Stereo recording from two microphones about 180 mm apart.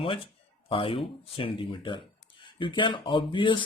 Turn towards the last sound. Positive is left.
turn(degrees=25)  # may be behind; listen again after turning